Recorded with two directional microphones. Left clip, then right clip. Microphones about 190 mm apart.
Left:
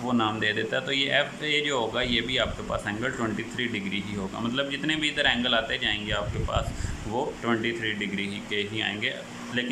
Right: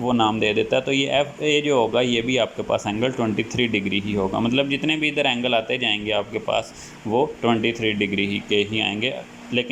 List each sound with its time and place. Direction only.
0.1 s speech: 15° right (ahead or behind)